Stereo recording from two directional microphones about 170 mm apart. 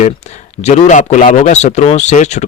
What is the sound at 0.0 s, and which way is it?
Speech, 40° left (ahead or behind).